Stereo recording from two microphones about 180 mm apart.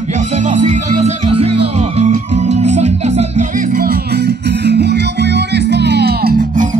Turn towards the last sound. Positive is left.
turn(degrees=-55)  # may be behind; listen again after turning